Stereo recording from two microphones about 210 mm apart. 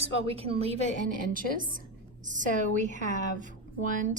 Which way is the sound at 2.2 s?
35° right (ahead or behind).